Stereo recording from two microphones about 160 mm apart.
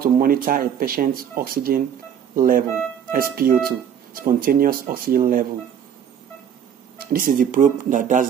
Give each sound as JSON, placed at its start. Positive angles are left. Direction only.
{"t": 0.0, "sound": "speech", "side_deg": -65}
{"t": 7.1, "sound": "speech", "side_deg": -60}